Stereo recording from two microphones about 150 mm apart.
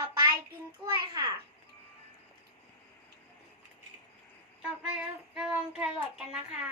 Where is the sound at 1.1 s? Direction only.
25° right (ahead or behind).